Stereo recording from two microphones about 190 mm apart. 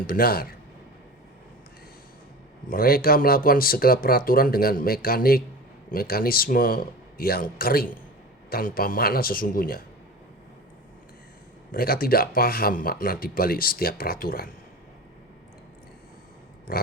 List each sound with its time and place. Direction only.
0.1 s speech: 50° left (ahead or behind)
2.6 s speech: 50° left (ahead or behind)
11.7 s speech: 50° left (ahead or behind)
16.7 s speech: 50° left (ahead or behind)